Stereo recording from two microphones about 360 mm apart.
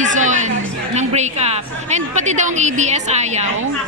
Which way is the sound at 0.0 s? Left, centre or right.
Centre.